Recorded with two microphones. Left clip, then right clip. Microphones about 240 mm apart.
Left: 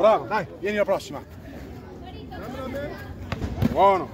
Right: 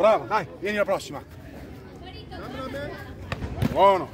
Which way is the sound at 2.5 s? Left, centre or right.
Right.